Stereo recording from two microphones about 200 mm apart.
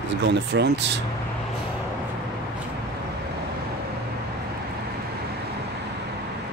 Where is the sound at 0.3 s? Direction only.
60° right (ahead or behind).